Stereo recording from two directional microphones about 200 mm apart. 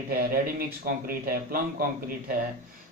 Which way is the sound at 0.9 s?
45° right (ahead or behind).